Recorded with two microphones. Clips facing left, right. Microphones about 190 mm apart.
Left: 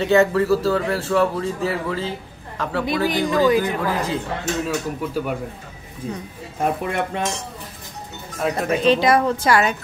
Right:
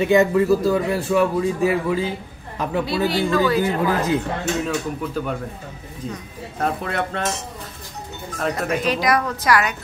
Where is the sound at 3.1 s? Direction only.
15° left (ahead or behind).